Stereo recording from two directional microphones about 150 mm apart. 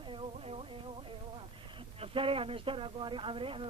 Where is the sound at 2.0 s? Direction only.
35° right (ahead or behind).